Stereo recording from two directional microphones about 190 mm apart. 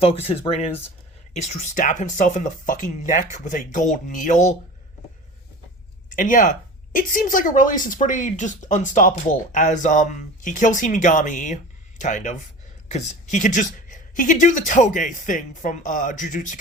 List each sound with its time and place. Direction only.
0.0 s speech: 30° left (ahead or behind)
6.1 s speech: 45° left (ahead or behind)